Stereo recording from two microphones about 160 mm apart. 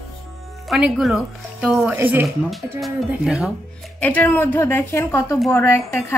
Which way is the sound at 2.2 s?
Centre (ahead or behind).